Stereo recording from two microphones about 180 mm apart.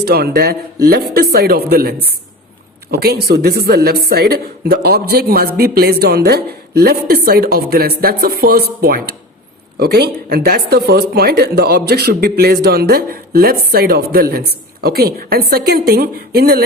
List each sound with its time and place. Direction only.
0.0 s speech: 60° right (ahead or behind)